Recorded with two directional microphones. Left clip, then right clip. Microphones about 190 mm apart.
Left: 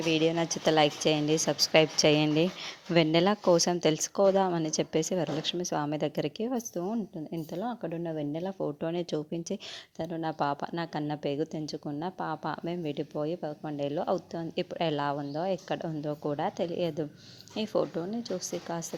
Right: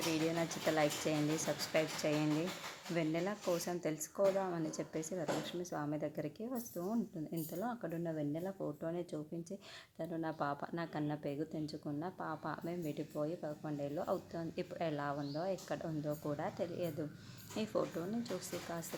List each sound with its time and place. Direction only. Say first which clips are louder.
0.1 s a woman's voice: left 13 dB; 40° left (ahead or behind)